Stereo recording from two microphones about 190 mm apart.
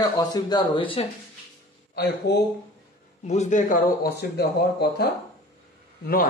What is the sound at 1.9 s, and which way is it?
Speech, 60° left (ahead or behind).